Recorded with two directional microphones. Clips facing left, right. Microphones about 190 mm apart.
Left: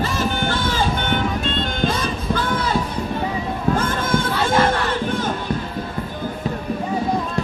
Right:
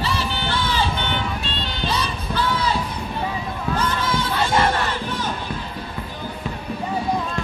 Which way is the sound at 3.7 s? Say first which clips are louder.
Left 3 dB; 50° left (ahead or behind).